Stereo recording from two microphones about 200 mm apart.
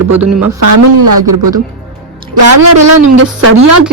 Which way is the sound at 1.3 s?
15° right (ahead or behind).